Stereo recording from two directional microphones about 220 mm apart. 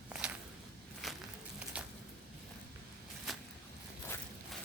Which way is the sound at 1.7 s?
5° right (ahead or behind).